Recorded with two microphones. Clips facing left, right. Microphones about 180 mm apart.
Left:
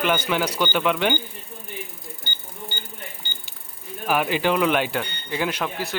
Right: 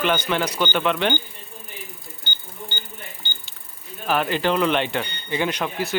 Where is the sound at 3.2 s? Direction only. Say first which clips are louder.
Right 1 dB; 40° left (ahead or behind).